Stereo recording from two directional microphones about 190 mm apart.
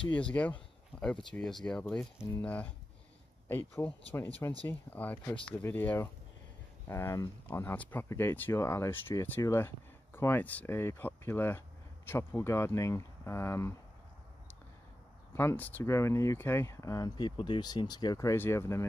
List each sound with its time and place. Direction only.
0.1 s speech: 5° left (ahead or behind)
15.3 s speech: 10° left (ahead or behind)